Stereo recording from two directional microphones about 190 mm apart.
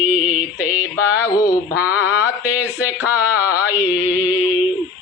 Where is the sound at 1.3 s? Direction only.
15° left (ahead or behind).